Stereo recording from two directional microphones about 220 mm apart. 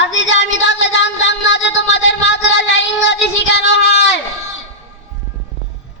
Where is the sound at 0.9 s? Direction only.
55° left (ahead or behind).